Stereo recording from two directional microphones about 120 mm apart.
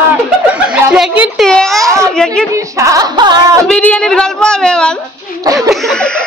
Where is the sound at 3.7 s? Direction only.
10° left (ahead or behind).